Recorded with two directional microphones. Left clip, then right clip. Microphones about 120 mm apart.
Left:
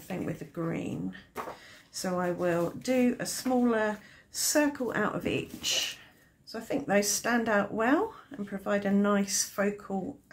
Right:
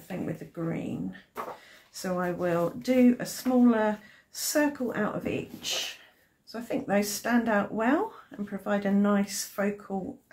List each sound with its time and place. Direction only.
0.1 s speech: 40° left (ahead or behind)
2.0 s speech: 15° left (ahead or behind)
4.8 s speech: 45° left (ahead or behind)
5.6 s speech: 30° left (ahead or behind)